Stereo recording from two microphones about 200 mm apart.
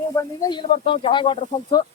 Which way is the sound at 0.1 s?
15° left (ahead or behind).